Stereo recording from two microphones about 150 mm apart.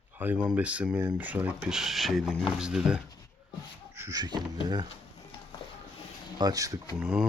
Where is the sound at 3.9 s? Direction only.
20° right (ahead or behind).